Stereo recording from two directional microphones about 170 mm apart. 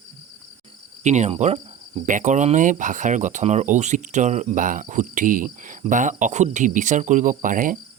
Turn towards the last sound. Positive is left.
turn(degrees=-50)  # may be behind; listen again after turning